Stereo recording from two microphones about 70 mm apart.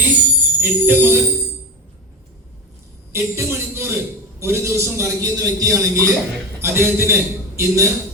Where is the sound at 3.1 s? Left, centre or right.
Right.